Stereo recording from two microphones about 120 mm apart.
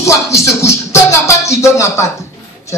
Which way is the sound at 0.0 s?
25° left (ahead or behind).